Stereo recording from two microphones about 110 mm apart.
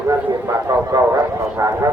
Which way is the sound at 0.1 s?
30° right (ahead or behind).